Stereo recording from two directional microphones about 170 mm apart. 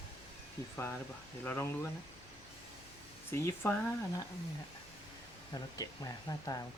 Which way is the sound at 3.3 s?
15° left (ahead or behind).